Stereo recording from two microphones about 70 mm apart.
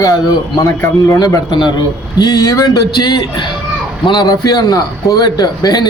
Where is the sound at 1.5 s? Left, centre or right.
Left.